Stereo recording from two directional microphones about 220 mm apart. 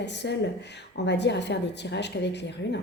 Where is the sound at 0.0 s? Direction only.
50° left (ahead or behind).